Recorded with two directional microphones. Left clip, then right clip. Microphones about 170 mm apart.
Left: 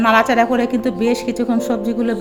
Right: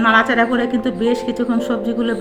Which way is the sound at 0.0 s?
55° left (ahead or behind).